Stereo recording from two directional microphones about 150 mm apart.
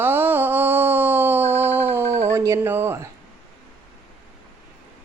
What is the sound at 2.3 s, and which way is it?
Speech, 20° right (ahead or behind).